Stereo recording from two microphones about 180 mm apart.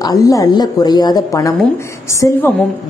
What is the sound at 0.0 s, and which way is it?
A woman's voice, 20° left (ahead or behind).